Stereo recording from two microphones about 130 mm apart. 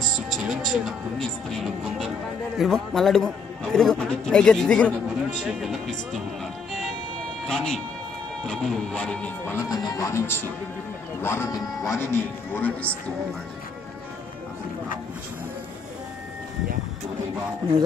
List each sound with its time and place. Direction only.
0.3 s music: 5° right (ahead or behind)
2.5 s a man's voice: centre (ahead or behind)
7.4 s a man's voice: 5° left (ahead or behind)
9.6 s speech: 30° left (ahead or behind)